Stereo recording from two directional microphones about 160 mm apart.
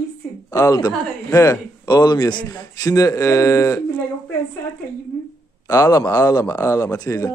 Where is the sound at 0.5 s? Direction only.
20° left (ahead or behind).